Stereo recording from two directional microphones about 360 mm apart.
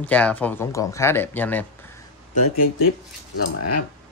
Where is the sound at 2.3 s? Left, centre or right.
Left.